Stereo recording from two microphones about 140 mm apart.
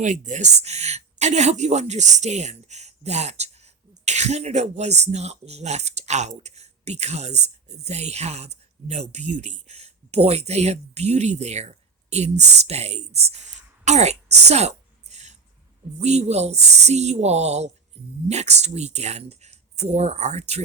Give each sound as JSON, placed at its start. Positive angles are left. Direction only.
{"t": 0.0, "sound": "speech", "side_deg": -60}